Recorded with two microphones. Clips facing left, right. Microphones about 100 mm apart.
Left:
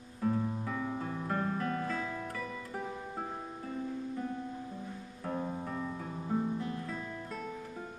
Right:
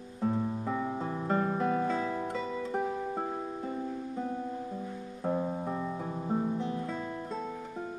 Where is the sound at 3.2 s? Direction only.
15° right (ahead or behind).